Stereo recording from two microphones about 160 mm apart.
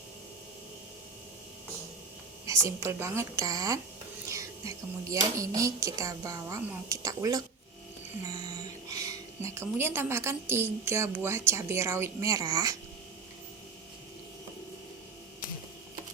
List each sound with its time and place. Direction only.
2.5 s a woman's voice: 20° right (ahead or behind)